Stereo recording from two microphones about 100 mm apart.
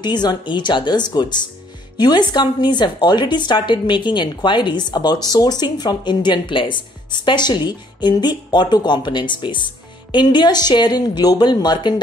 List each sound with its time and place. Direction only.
0.0 s speech: 45° left (ahead or behind)